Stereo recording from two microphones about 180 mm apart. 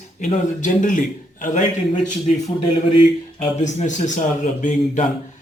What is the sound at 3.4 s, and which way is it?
A man's voice, 40° left (ahead or behind).